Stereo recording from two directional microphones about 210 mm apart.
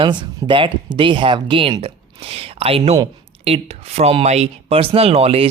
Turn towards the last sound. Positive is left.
turn(degrees=-30)  # may be behind; listen again after turning